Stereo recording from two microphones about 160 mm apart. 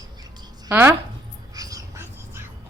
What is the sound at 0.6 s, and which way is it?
Speech, 15° right (ahead or behind).